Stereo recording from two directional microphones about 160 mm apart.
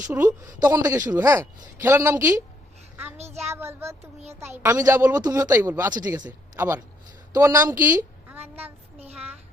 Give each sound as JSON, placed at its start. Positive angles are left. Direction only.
{"t": 0.0, "sound": "a woman's voice", "side_deg": -15}
{"t": 3.4, "sound": "a woman's voice", "side_deg": -15}